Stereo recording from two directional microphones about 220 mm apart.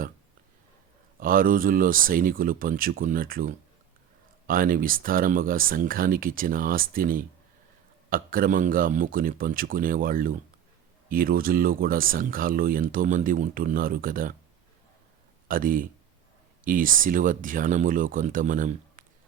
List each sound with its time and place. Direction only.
1.2 s speech: 40° right (ahead or behind)
15.4 s speech: 40° right (ahead or behind)